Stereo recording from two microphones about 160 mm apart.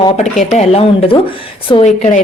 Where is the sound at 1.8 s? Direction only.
50° left (ahead or behind).